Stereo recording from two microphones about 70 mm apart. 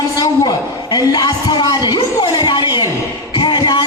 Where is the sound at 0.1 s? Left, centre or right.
Left.